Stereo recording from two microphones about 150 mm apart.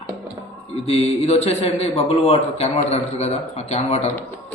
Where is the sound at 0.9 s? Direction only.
45° left (ahead or behind).